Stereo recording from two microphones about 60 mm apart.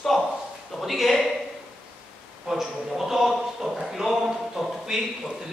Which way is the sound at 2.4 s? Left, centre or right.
Centre.